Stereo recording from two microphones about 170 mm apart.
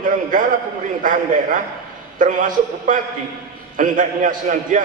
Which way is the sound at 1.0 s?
50° right (ahead or behind).